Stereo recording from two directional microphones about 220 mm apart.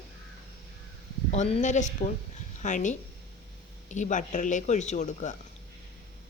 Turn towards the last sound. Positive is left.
turn(degrees=35)  # may be behind; listen again after turning